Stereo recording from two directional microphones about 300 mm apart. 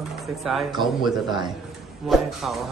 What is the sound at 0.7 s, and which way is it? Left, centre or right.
Speech, centre.